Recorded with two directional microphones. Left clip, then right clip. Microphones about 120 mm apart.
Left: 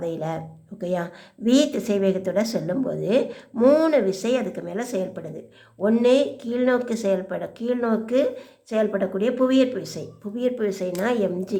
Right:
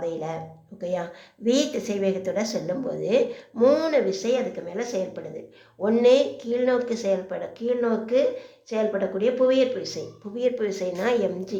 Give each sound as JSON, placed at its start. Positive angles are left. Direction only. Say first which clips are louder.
{"t": 0.0, "sound": "a woman's voice", "louder": "left 1 dB", "side_deg": 40}
{"t": 4.2, "sound": "speech", "louder": "left 1 dB", "side_deg": 55}
{"t": 5.8, "sound": "speech", "louder": "even", "side_deg": 40}
{"t": 10.3, "sound": "a woman's voice", "louder": "even", "side_deg": 40}